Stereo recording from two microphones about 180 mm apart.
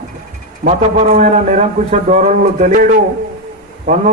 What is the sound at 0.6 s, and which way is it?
A man's voice, 45° right (ahead or behind).